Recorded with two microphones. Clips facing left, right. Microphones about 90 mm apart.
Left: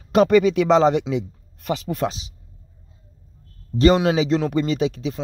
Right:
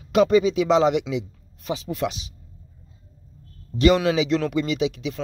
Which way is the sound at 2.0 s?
30° left (ahead or behind).